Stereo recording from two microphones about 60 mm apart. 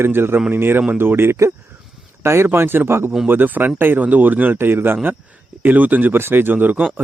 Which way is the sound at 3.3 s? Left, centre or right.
Right.